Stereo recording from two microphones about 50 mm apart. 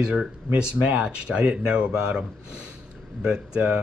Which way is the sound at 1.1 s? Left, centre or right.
Right.